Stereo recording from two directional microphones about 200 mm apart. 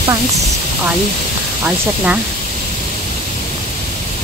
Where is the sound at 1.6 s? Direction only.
5° right (ahead or behind).